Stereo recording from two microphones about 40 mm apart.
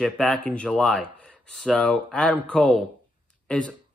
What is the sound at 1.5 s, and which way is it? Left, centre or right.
Speech, centre.